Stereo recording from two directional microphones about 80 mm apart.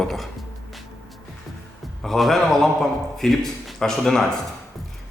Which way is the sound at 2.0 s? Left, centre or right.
Centre.